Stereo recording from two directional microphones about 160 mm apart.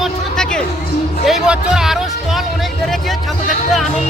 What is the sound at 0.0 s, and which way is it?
Music, 5° left (ahead or behind).